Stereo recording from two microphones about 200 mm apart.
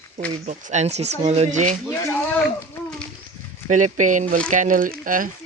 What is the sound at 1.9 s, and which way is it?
Speech, 5° left (ahead or behind).